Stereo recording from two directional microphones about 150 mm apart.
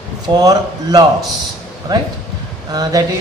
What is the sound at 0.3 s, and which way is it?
Speech, 25° right (ahead or behind).